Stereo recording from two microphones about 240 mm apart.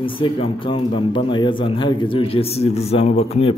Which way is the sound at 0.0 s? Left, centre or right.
Left.